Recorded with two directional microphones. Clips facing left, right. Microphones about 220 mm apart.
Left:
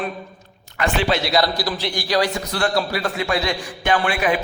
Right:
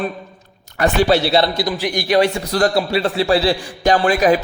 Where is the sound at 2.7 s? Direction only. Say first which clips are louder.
Right 5 dB; 25° right (ahead or behind).